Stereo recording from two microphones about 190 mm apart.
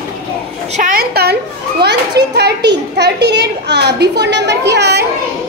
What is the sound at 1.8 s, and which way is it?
A child's voice, 60° right (ahead or behind).